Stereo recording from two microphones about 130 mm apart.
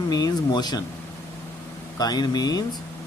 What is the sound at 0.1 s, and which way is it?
Speech, 30° left (ahead or behind).